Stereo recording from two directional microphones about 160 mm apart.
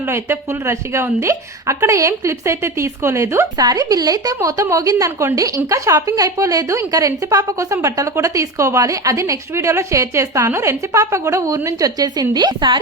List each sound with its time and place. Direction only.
0.1 s a woman's voice: 15° right (ahead or behind)